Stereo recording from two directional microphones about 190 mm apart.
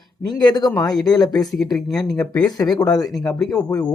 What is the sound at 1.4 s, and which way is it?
Speech, centre (ahead or behind).